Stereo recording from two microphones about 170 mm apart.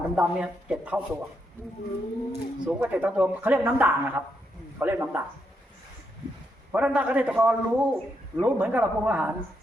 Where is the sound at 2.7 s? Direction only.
10° right (ahead or behind).